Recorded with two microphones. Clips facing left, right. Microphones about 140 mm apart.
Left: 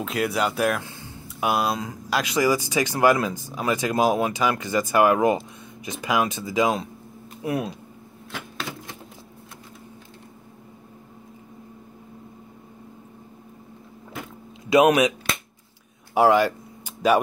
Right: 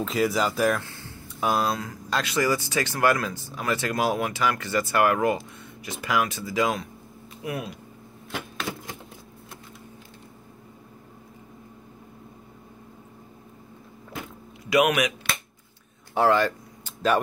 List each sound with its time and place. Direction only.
0.0 s speech: centre (ahead or behind)
0.8 s a sound: 15° left (ahead or behind)
1.4 s speech: 10° left (ahead or behind)
7.4 s speech: 35° left (ahead or behind)
14.7 s speech: 30° left (ahead or behind)
16.2 s a sound: 10° left (ahead or behind)